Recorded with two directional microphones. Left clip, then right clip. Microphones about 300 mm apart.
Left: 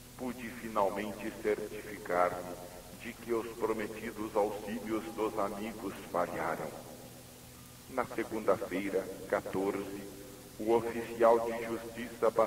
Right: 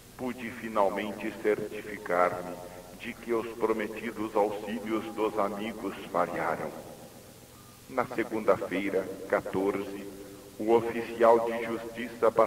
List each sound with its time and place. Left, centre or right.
0.2 s a man's voice: left
7.9 s a man's voice: left